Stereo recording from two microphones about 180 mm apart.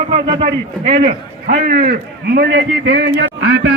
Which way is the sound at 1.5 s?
60° right (ahead or behind).